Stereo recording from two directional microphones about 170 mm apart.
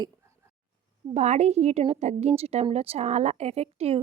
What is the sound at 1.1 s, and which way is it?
A woman's voice, 40° right (ahead or behind).